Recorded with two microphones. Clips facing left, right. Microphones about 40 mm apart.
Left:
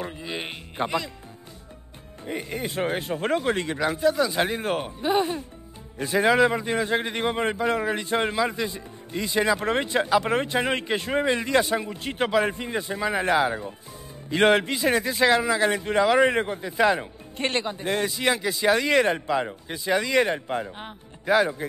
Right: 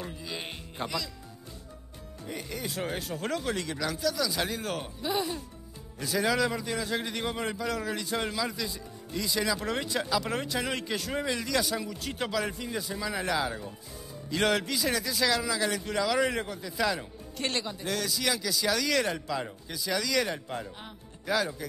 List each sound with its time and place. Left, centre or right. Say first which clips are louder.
0.0 s a man's voice: left 6 dB; left
2.2 s a man's voice: left 6 dB; left